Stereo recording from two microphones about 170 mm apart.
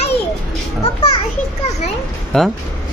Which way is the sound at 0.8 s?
35° left (ahead or behind).